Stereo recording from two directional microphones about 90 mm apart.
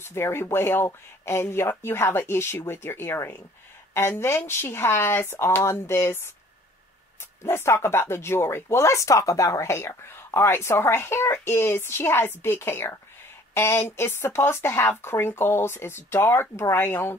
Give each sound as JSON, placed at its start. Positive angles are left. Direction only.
{"t": 0.0, "sound": "speech", "side_deg": 30}
{"t": 7.4, "sound": "speech", "side_deg": 30}